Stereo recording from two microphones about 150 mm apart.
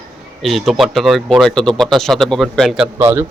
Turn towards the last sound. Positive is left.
turn(degrees=-15)  # may be behind; listen again after turning